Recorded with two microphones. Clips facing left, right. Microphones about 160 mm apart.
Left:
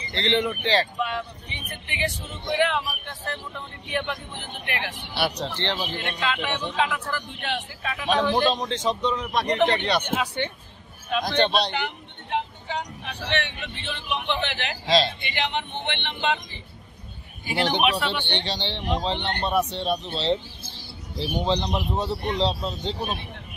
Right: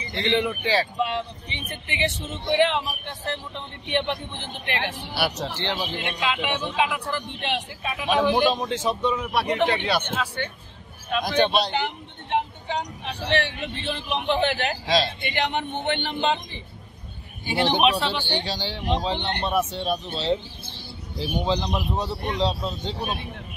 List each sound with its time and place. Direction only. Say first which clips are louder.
0.1 s a man's voice: even; 5° right (ahead or behind)
0.9 s speech: right 2 dB; 25° right (ahead or behind)
5.1 s a man's voice: left 1 dB; 5° right (ahead or behind)
10.0 s speech: left 2 dB; 15° left (ahead or behind)
11.1 s speech: right 1 dB; 5° right (ahead or behind)
11.7 s speech: right 3 dB; 30° right (ahead or behind)
17.8 s speech: right 2 dB; 30° right (ahead or behind)
18.4 s speech: even; 5° right (ahead or behind)
19.1 s speech: right 1 dB; 20° right (ahead or behind)
19.4 s speech: left 1 dB; centre (ahead or behind)